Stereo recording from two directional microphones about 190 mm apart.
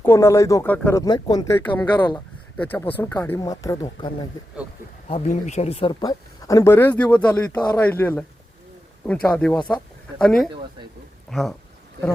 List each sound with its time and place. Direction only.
0.0 s speech: 15° left (ahead or behind)
1.0 s speech: 20° left (ahead or behind)
2.6 s speech: 10° left (ahead or behind)
5.0 s speech: 35° left (ahead or behind); by 11.5 s centre (ahead or behind)